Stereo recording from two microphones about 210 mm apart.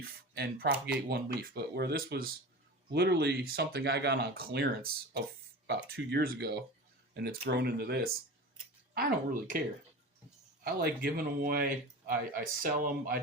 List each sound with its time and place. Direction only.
0.3 s speech: 50° right (ahead or behind)
10.6 s speech: 50° right (ahead or behind)